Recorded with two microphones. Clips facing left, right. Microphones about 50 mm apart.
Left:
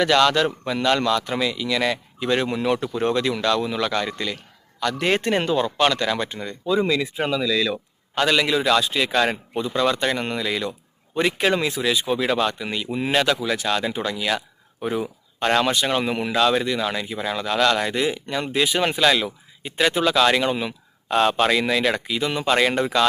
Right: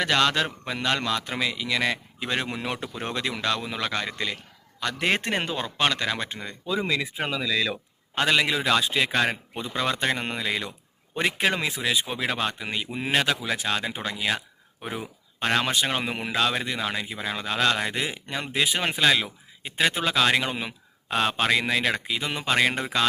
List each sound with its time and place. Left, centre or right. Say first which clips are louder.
0.0 s speech: left 5 dB; centre
14.8 s speech: left 8 dB; centre